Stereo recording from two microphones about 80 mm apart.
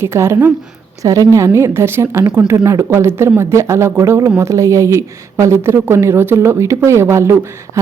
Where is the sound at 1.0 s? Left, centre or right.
Right.